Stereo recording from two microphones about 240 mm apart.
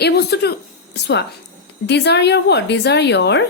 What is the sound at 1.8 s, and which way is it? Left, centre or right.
Speech, left.